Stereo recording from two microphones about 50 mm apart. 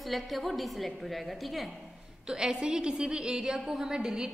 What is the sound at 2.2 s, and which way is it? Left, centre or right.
A woman's voice, centre.